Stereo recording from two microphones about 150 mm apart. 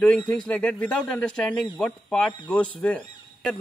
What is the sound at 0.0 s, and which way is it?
Speech, 5° left (ahead or behind).